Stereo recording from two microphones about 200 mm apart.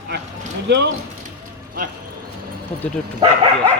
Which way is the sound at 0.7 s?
60° right (ahead or behind).